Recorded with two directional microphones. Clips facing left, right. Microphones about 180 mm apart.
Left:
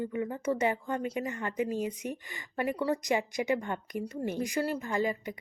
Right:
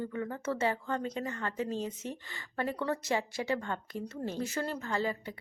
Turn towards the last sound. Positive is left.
turn(degrees=15)  # may be behind; listen again after turning